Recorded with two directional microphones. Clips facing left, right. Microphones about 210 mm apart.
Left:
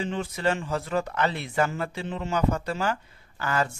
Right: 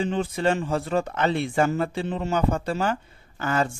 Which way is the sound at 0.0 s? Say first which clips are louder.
Right 4 dB; 30° right (ahead or behind).